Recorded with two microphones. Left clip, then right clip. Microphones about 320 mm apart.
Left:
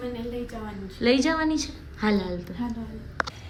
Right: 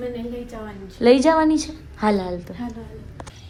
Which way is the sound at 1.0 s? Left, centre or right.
Centre.